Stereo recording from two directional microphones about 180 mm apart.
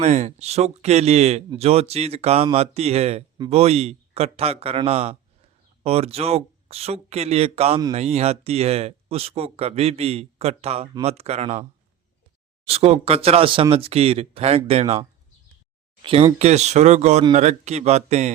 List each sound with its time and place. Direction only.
0.0 s speech: 40° right (ahead or behind)
12.6 s speech: 35° right (ahead or behind)
16.0 s speech: 30° right (ahead or behind)